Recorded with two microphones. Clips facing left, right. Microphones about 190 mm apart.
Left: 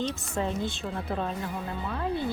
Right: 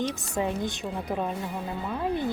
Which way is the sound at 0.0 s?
15° right (ahead or behind).